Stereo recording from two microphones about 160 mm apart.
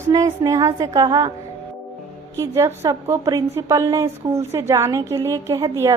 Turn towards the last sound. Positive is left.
turn(degrees=-20)  # may be behind; listen again after turning